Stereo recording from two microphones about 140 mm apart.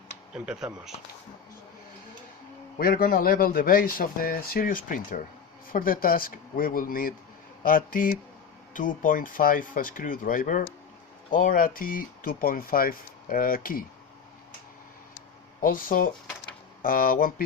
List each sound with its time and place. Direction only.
0.3 s speech: 5° right (ahead or behind)
2.7 s speech: 90° left
5.6 s speech: 90° left
15.6 s speech: 90° left